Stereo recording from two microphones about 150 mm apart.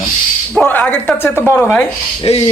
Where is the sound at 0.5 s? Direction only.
10° left (ahead or behind).